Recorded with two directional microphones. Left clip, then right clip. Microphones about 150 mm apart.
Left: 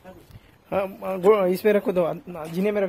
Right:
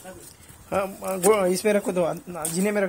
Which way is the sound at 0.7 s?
25° left (ahead or behind).